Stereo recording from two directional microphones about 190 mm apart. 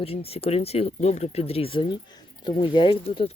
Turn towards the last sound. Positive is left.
turn(degrees=30)  # may be behind; listen again after turning